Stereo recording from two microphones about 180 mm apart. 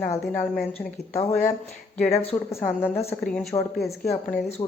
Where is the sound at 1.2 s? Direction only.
40° left (ahead or behind).